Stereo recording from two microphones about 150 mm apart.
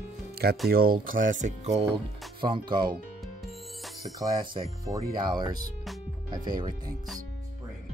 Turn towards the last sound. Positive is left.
turn(degrees=-25)  # may be behind; listen again after turning